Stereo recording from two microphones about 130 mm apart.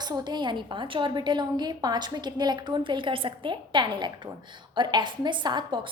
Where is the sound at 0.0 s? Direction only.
35° right (ahead or behind).